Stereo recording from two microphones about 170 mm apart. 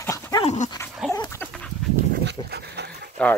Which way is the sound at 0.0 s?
15° left (ahead or behind).